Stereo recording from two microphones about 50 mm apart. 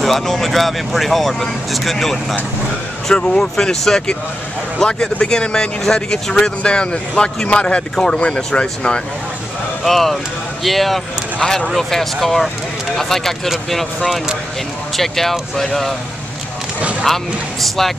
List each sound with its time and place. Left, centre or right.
0.0 s speech: centre
3.2 s speech: centre
9.8 s speech: centre
17.0 s speech: centre